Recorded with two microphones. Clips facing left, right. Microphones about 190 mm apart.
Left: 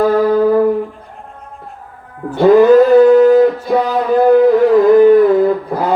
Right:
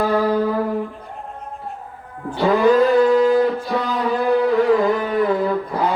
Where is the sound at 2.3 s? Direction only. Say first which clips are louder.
Left 8 dB; 50° left (ahead or behind).